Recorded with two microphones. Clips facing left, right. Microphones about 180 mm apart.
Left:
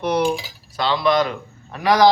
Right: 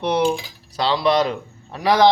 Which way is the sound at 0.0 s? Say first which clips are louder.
Even; 25° right (ahead or behind).